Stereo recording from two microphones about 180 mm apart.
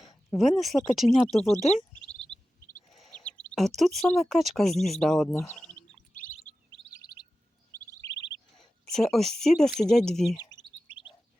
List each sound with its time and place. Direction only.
0.0 s speech: centre (ahead or behind)
2.0 s a sound: 5° left (ahead or behind)
3.8 s speech: centre (ahead or behind)
6.1 s chirp: 45° left (ahead or behind)
7.0 s chirp: 20° left (ahead or behind)
8.5 s a woman's voice: centre (ahead or behind)
10.5 s chirp: 25° left (ahead or behind)